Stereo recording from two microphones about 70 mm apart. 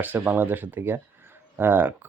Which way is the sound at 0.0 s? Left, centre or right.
Right.